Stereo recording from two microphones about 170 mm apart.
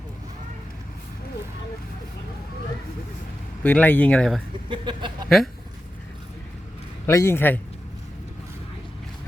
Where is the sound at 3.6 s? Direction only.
10° left (ahead or behind).